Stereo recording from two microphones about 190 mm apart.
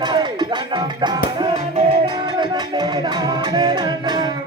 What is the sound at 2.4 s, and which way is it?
Music, 20° right (ahead or behind).